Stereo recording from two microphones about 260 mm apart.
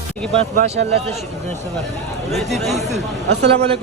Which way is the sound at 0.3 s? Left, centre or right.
Right.